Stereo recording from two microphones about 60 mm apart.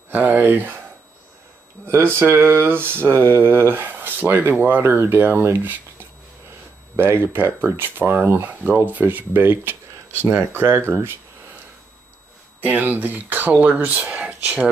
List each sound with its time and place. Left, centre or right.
0.1 s speech: right
1.9 s speech: right
4.8 s speech: right
7.0 s speech: right
8.2 s speech: right
12.5 s speech: right
14.1 s whispering: right